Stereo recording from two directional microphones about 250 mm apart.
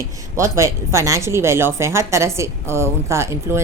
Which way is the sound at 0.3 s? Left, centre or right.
Centre.